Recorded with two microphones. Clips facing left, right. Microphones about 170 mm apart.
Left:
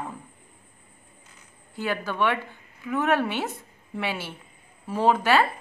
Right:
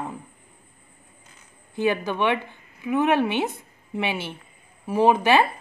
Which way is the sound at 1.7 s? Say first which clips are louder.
Right 4 dB; 20° right (ahead or behind).